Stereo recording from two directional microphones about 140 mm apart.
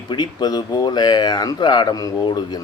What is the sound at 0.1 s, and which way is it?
Speech, 30° left (ahead or behind).